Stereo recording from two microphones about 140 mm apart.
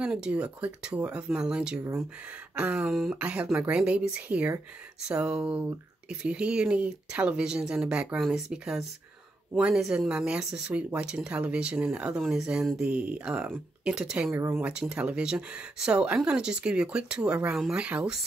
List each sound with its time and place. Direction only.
0.0 s speech: 5° right (ahead or behind)
14.7 s speech: 5° right (ahead or behind)